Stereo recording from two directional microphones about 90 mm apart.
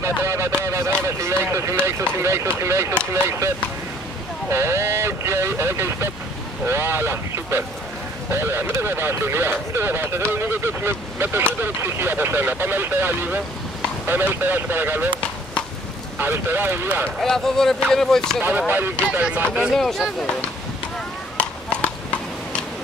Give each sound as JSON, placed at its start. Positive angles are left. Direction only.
{"t": 0.0, "sound": "a sound", "side_deg": -30}
{"t": 0.7, "sound": "speech", "side_deg": -30}
{"t": 16.2, "sound": "speech", "side_deg": -25}
{"t": 17.2, "sound": "speech", "side_deg": 5}
{"t": 18.7, "sound": "speech", "side_deg": -20}
{"t": 19.7, "sound": "speech", "side_deg": 5}
{"t": 21.4, "sound": "a sound", "side_deg": 15}